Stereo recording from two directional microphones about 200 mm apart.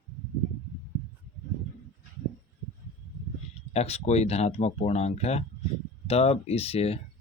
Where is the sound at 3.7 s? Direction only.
30° left (ahead or behind).